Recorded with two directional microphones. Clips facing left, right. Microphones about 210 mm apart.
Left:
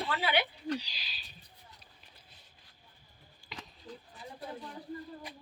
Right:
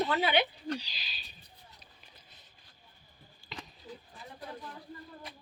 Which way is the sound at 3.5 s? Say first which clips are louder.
Right 2 dB; 10° left (ahead or behind).